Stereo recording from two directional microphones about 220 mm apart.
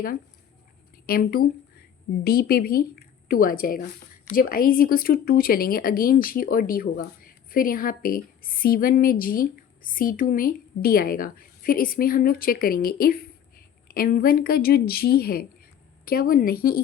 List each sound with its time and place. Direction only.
1.0 s a woman's voice: 45° left (ahead or behind)